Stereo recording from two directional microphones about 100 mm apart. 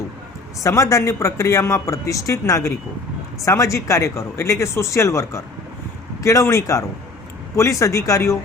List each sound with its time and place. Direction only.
0.6 s a man's voice: 35° left (ahead or behind)